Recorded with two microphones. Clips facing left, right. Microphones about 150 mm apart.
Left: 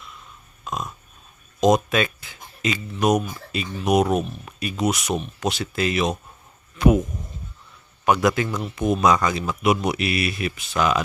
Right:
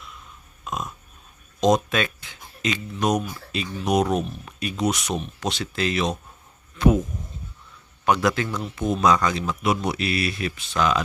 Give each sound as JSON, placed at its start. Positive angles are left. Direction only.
{"t": 0.6, "sound": "a sound", "side_deg": 0}
{"t": 1.6, "sound": "speech", "side_deg": 5}
{"t": 8.0, "sound": "speech", "side_deg": 10}